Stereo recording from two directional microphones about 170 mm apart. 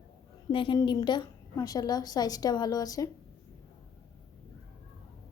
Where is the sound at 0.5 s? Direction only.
30° left (ahead or behind).